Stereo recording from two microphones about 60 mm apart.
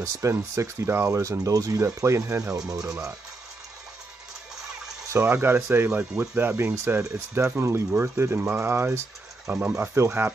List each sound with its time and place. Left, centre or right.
0.0 s speech: right
1.4 s speech: right
1.8 s speech: right
2.8 s speech: centre
5.1 s speech: right
6.5 s speech: right
9.5 s speech: right
9.9 s speech: right